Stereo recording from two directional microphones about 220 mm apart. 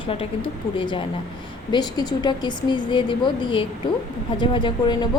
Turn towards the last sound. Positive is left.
turn(degrees=20)  # may be behind; listen again after turning